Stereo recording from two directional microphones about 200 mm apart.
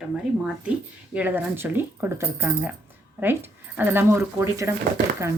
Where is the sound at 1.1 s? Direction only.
10° right (ahead or behind).